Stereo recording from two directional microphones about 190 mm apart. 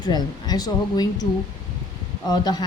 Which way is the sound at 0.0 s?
20° left (ahead or behind).